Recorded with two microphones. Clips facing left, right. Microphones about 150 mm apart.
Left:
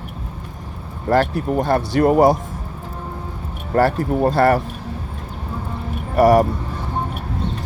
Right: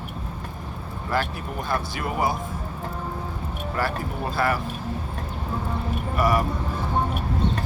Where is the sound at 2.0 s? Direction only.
40° left (ahead or behind).